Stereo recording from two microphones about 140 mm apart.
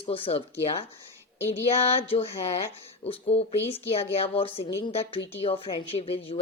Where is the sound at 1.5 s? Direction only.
45° left (ahead or behind).